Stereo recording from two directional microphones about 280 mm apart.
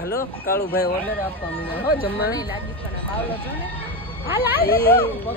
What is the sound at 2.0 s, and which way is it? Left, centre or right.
Speech, left.